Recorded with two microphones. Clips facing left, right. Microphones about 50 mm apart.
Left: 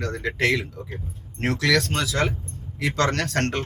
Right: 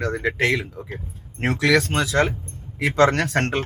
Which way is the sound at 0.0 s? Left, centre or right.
Right.